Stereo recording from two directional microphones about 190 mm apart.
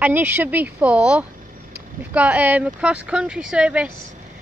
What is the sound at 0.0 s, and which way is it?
A woman's voice, 10° right (ahead or behind).